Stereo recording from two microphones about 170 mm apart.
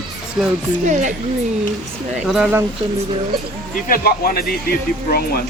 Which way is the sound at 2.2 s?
5° right (ahead or behind).